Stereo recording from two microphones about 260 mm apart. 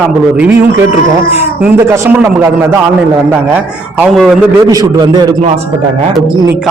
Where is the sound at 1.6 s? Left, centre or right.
Centre.